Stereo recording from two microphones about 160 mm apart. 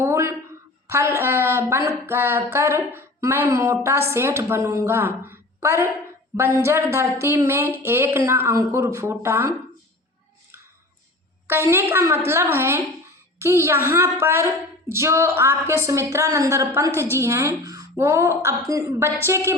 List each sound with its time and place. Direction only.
0.0 s a sound: 15° right (ahead or behind)
0.9 s speech: 15° right (ahead or behind)
11.4 s speech: 15° right (ahead or behind)